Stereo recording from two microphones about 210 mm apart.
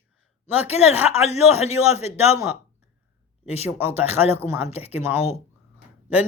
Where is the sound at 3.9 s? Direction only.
30° left (ahead or behind).